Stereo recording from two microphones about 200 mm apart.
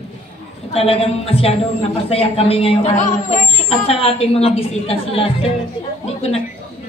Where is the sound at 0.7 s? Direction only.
30° left (ahead or behind).